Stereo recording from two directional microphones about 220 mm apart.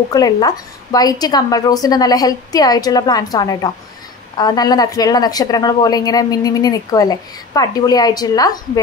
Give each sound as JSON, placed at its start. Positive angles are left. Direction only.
{"t": 0.1, "sound": "speech", "side_deg": 15}